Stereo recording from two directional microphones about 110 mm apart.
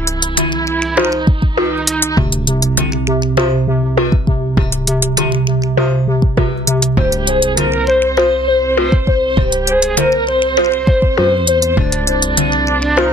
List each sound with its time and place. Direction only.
8.2 s music: 45° left (ahead or behind)
9.1 s music: 45° right (ahead or behind)
10.3 s music: 50° left (ahead or behind)
11.2 s music: 50° right (ahead or behind)